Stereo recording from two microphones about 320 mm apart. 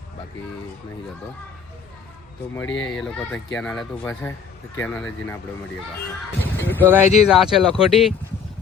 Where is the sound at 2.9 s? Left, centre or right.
Centre.